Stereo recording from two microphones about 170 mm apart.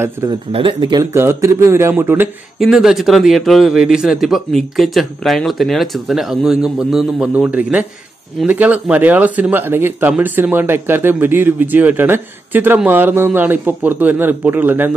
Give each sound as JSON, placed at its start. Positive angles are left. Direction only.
{"t": 0.0, "sound": "speech", "side_deg": -15}
{"t": 0.5, "sound": "speech", "side_deg": -30}
{"t": 1.1, "sound": "speech", "side_deg": -15}
{"t": 2.6, "sound": "speech", "side_deg": 0}